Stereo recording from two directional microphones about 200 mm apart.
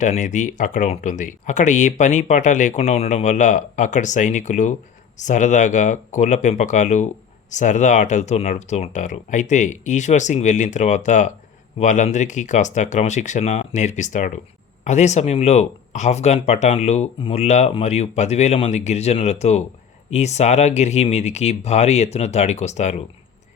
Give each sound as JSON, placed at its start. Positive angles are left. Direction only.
{"t": 0.0, "sound": "speech", "side_deg": 40}